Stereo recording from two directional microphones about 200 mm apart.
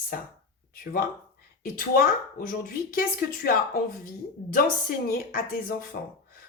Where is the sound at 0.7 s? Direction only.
45° left (ahead or behind).